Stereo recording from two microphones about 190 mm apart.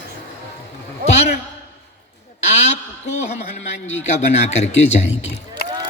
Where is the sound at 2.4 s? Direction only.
35° left (ahead or behind).